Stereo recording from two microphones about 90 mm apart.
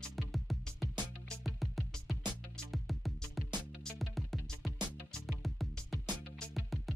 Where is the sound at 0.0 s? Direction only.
Centre (ahead or behind).